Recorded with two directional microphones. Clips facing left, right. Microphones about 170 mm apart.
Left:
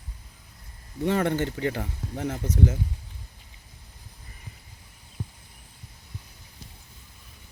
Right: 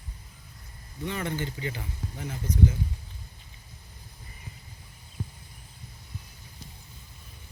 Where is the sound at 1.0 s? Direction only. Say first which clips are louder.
Left 8 dB; 65° left (ahead or behind).